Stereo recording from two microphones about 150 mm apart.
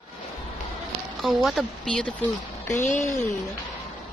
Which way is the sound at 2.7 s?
55° left (ahead or behind).